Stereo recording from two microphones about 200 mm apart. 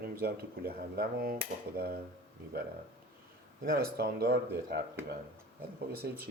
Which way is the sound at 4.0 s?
50° right (ahead or behind).